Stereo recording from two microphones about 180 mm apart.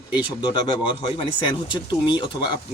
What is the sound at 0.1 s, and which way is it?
Speech, 25° left (ahead or behind).